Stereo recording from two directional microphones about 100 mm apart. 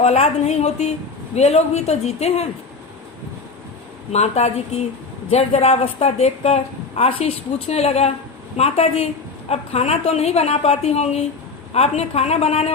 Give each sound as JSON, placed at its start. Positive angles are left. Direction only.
{"t": 0.0, "sound": "a woman's voice", "side_deg": 90}
{"t": 4.1, "sound": "a woman's voice", "side_deg": 90}